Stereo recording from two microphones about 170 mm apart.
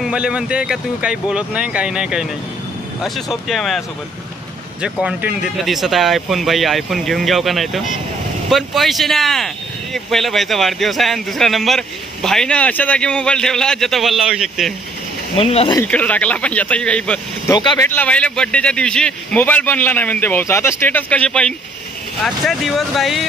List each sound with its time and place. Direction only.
0.0 s speech: 5° right (ahead or behind)
5.0 s speech: 5° right (ahead or behind)
15.3 s speech: 35° left (ahead or behind)
15.8 s speech: 10° left (ahead or behind)
17.5 s speech: 20° left (ahead or behind); by 23.2 s centre (ahead or behind)